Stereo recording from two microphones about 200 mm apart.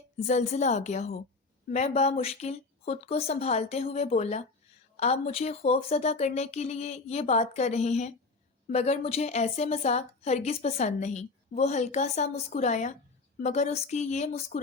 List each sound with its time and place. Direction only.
0.3 s a woman's voice: 35° left (ahead or behind)